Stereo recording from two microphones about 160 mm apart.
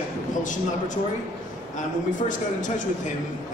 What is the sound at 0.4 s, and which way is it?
Speech, 50° left (ahead or behind).